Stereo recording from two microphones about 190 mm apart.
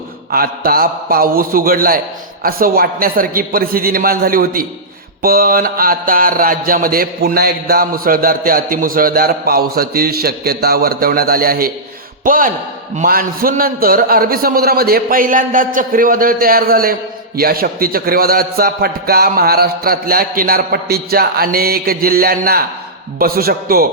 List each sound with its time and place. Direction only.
0.3 s a man's voice: 50° right (ahead or behind)